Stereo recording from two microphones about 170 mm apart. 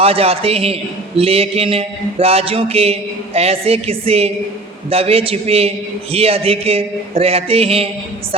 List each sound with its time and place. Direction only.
0.0 s a man's voice: 35° right (ahead or behind)